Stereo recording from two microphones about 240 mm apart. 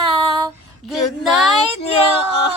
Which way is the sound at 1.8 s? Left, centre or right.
Left.